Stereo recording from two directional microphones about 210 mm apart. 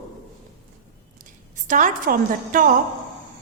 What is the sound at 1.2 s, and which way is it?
A woman's voice, 40° right (ahead or behind).